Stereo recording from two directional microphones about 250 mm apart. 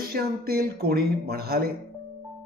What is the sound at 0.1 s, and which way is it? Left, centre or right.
A man's voice, right.